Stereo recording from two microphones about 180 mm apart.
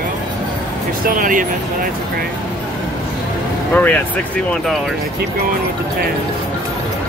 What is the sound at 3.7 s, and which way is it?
Speech, 10° left (ahead or behind).